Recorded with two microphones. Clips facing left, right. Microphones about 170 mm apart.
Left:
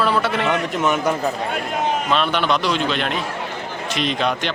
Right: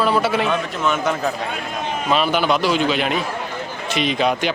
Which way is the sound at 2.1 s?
5° right (ahead or behind).